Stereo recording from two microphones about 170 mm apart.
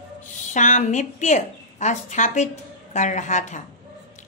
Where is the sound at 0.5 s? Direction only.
45° left (ahead or behind).